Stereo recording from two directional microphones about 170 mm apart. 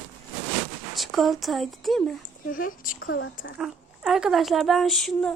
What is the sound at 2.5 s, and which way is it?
Speech, 55° left (ahead or behind).